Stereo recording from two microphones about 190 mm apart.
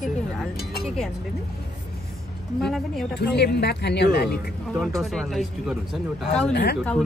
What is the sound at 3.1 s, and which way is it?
Speech, 60° left (ahead or behind).